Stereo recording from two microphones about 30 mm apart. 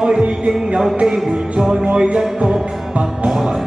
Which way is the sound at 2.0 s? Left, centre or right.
Right.